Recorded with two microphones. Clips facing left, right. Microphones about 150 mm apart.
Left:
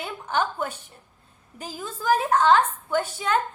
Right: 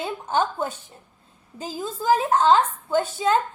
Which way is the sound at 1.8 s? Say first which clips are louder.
Right 2 dB; 15° right (ahead or behind).